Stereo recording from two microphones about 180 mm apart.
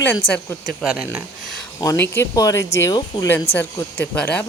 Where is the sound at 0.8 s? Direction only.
5° right (ahead or behind).